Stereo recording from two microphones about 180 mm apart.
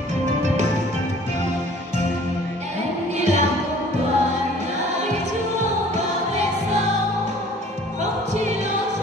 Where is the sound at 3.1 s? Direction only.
40° right (ahead or behind).